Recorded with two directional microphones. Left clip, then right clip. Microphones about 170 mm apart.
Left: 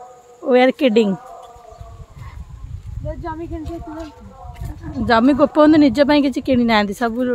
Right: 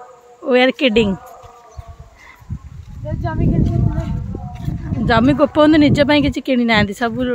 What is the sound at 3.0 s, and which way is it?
Speech, 30° right (ahead or behind).